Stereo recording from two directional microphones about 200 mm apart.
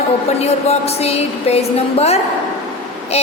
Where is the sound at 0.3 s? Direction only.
30° left (ahead or behind).